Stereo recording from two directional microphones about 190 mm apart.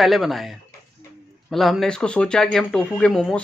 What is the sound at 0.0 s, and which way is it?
Speech, centre (ahead or behind).